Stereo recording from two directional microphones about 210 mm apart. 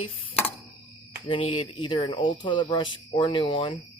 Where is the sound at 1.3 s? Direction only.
25° left (ahead or behind).